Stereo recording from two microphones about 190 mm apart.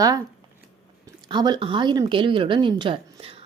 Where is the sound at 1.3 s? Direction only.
25° right (ahead or behind).